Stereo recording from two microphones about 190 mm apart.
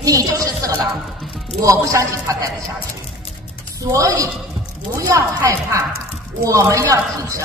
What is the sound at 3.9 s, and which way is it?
Speech, 15° right (ahead or behind).